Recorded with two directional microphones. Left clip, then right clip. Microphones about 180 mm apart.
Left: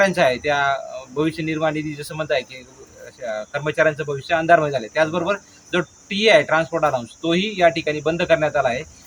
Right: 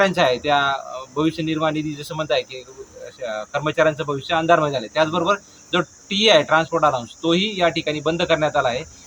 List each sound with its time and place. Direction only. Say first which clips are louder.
0.0 s speech: even; 5° right (ahead or behind)